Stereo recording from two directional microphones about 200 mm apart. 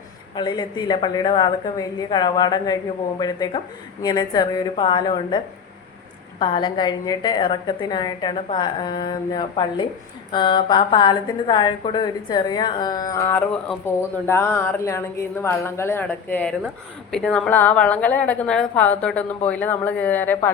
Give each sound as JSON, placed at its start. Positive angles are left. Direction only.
{"t": 0.3, "sound": "a woman's voice", "side_deg": 20}
{"t": 6.4, "sound": "a woman's voice", "side_deg": 25}